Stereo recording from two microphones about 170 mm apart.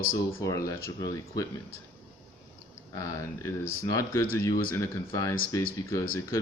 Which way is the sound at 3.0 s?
20° left (ahead or behind).